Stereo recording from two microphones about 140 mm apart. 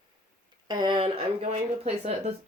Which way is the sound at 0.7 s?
30° right (ahead or behind).